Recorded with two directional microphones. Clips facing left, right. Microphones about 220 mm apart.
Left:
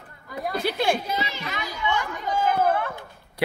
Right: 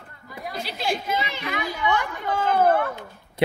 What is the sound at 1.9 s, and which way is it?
Chatter, 60° right (ahead or behind).